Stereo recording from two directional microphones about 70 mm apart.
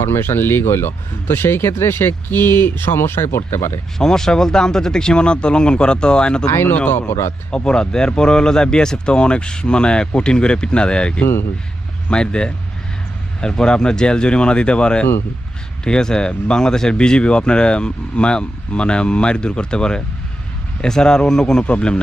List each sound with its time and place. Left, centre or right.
0.0 s speech: left
3.9 s speech: centre
6.5 s speech: left
7.5 s speech: centre